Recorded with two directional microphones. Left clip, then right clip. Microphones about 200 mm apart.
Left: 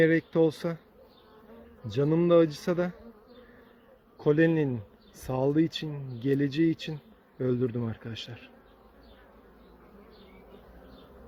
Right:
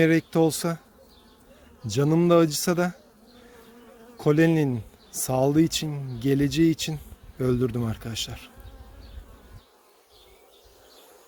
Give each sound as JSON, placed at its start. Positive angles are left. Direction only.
{"t": 0.0, "sound": "speech", "side_deg": -35}
{"t": 1.9, "sound": "speech", "side_deg": -40}
{"t": 4.2, "sound": "speech", "side_deg": -35}